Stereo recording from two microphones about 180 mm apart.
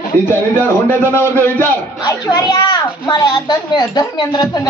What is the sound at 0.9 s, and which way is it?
Speech, 10° left (ahead or behind).